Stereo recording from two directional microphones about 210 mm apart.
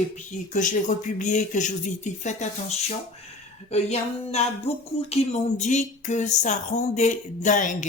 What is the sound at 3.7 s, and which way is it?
Speech, 30° left (ahead or behind).